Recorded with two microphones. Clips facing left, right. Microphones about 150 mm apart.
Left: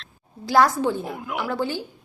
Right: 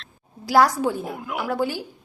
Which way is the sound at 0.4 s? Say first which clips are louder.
Even; 10° right (ahead or behind).